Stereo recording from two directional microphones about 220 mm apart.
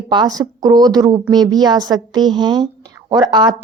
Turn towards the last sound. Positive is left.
turn(degrees=-20)  # may be behind; listen again after turning